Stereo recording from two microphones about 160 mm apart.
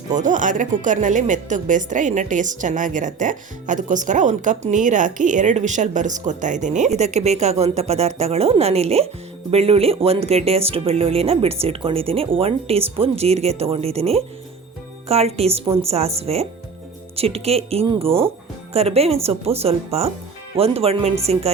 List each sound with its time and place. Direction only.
0.1 s a woman's voice: 50° right (ahead or behind)